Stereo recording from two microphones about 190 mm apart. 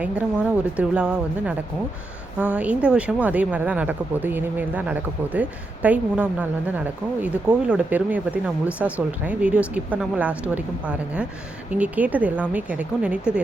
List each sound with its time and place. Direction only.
0.0 s speech: 5° right (ahead or behind)